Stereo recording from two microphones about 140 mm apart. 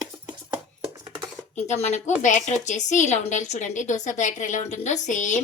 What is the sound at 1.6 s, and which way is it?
A woman's voice, 50° left (ahead or behind).